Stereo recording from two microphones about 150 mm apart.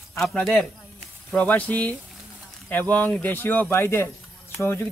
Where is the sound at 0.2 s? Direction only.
5° left (ahead or behind).